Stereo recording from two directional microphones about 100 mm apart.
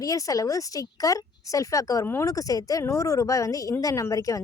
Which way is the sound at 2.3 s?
35° left (ahead or behind).